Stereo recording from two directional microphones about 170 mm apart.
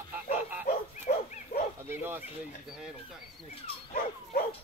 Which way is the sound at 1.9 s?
10° right (ahead or behind).